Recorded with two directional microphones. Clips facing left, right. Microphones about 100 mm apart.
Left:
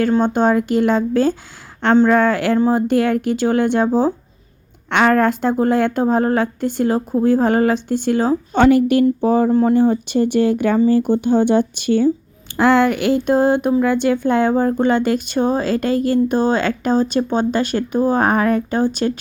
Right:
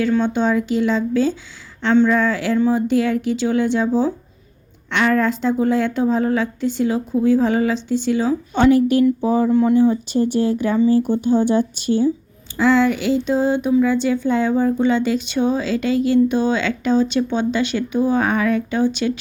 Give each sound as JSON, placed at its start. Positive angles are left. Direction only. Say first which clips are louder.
{"t": 0.1, "sound": "speech", "louder": "left 3 dB", "side_deg": 45}
{"t": 9.5, "sound": "speech", "louder": "left 1 dB", "side_deg": 40}
{"t": 9.7, "sound": "speech", "louder": "left 1 dB", "side_deg": 55}